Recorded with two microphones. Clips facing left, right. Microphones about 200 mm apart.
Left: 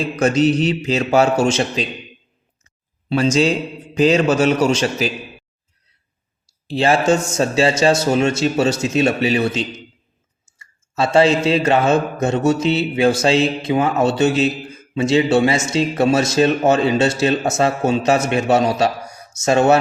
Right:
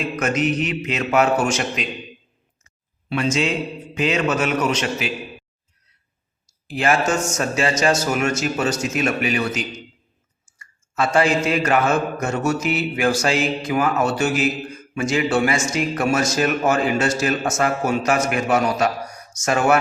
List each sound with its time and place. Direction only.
0.0 s a man's voice: 30° left (ahead or behind)
3.1 s a man's voice: 35° left (ahead or behind)
6.7 s speech: 30° left (ahead or behind)